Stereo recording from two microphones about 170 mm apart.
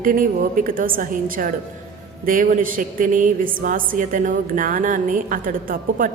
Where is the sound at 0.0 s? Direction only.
55° right (ahead or behind).